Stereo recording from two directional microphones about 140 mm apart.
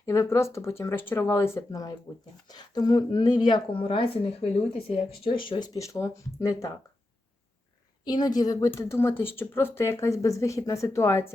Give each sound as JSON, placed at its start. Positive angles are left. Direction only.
{"t": 0.0, "sound": "speech", "side_deg": 20}
{"t": 8.0, "sound": "speech", "side_deg": 30}